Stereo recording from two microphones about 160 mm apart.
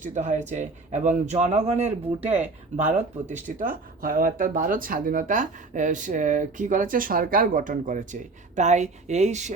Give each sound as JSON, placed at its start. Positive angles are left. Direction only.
{"t": 0.0, "sound": "speech", "side_deg": -50}